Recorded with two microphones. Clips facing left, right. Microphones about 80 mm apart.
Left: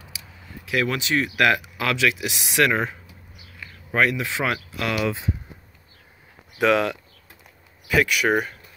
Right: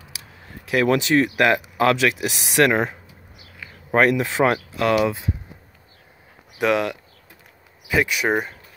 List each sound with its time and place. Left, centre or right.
0.7 s speech: right
6.6 s speech: centre